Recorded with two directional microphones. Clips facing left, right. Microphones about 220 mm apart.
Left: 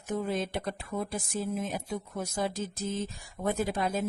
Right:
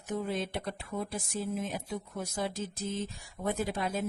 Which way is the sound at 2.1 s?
45° left (ahead or behind).